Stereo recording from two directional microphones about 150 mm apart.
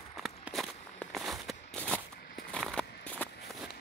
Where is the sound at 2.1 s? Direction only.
90° left.